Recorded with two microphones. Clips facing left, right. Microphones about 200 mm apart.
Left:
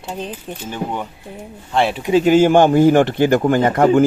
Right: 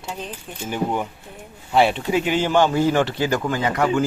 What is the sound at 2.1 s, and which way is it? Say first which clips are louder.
Speech: left 8 dB; 40° left (ahead or behind).